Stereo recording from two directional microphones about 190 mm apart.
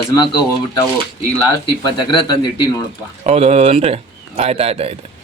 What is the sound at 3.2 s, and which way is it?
A man's voice, 35° right (ahead or behind).